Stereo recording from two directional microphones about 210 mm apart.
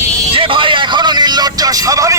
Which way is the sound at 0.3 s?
25° right (ahead or behind).